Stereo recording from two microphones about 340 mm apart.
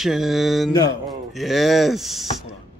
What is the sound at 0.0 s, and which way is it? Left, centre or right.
A man's voice, centre.